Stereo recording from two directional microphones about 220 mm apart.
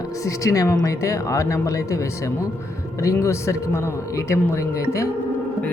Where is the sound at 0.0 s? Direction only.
15° left (ahead or behind).